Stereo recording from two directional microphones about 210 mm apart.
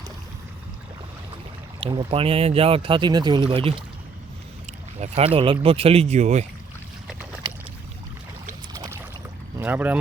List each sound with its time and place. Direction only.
1.8 s speech: 20° right (ahead or behind)
8.7 s boat: 15° right (ahead or behind)
9.6 s speech: 10° right (ahead or behind)